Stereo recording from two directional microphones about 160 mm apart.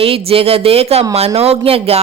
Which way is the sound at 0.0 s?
35° right (ahead or behind).